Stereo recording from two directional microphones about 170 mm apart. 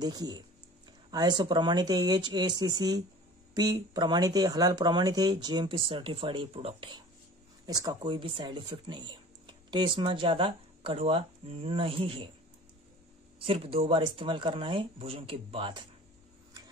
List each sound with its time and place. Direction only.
0.0 s speech: 25° right (ahead or behind)
7.6 s speech: 20° right (ahead or behind)
13.4 s speech: 35° right (ahead or behind)